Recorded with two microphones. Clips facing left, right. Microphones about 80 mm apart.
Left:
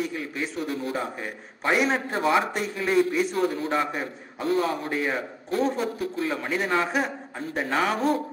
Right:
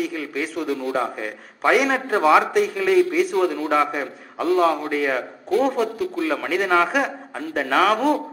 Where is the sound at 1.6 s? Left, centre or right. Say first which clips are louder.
Right 5 dB; right.